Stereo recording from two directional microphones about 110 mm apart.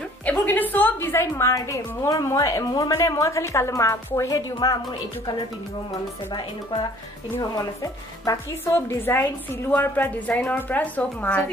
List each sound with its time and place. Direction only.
0.2 s a woman's voice: 15° left (ahead or behind)
4.6 s speech: 35° left (ahead or behind)
6.3 s speech: 45° left (ahead or behind)
8.6 s a woman's voice: 20° left (ahead or behind)